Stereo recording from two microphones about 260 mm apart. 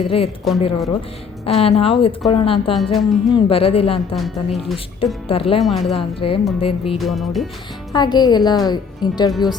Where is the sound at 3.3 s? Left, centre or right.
Left.